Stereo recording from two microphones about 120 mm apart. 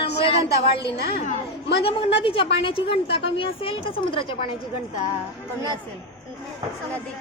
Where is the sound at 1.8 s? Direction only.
50° left (ahead or behind).